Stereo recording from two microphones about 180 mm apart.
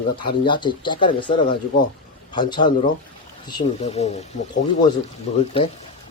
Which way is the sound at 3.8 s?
35° left (ahead or behind).